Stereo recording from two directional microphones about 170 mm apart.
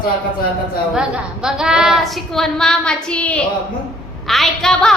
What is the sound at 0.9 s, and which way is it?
Child singing, 5° right (ahead or behind).